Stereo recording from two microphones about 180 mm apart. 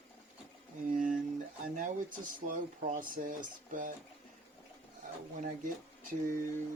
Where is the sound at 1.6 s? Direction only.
45° right (ahead or behind).